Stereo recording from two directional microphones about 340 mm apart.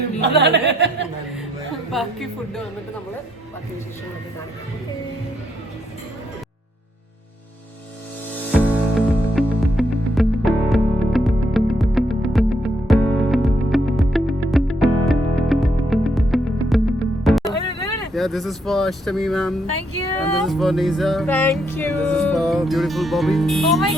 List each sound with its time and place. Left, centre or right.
0.2 s speech: right
1.9 s music: centre
8.5 s music: centre